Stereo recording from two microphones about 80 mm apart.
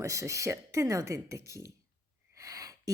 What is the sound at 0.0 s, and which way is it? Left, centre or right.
A woman's voice, right.